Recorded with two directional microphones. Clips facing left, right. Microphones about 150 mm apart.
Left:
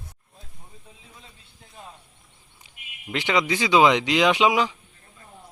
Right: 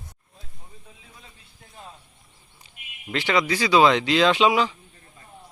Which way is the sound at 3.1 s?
20° left (ahead or behind).